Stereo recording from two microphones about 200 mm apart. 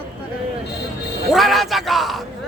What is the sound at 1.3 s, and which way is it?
Speech, centre (ahead or behind).